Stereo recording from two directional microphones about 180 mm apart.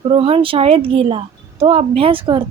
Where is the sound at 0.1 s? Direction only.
30° right (ahead or behind).